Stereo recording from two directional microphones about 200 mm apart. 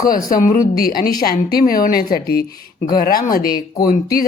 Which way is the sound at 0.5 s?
45° left (ahead or behind).